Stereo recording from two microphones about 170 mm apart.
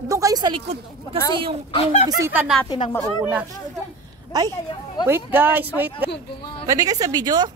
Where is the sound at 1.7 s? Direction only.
30° left (ahead or behind).